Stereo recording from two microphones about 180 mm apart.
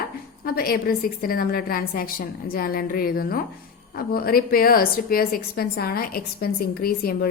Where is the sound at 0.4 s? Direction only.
55° left (ahead or behind).